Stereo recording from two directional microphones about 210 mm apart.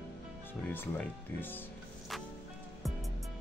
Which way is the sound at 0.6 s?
5° left (ahead or behind).